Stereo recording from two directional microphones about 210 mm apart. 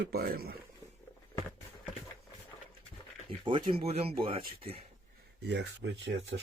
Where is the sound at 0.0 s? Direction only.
45° right (ahead or behind).